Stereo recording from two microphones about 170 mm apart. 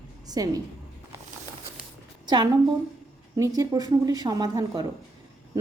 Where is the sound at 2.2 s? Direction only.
25° right (ahead or behind).